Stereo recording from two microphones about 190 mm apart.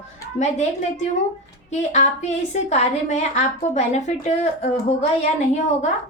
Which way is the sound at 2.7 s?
35° left (ahead or behind).